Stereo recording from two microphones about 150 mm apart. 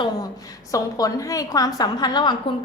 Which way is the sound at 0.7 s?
25° left (ahead or behind).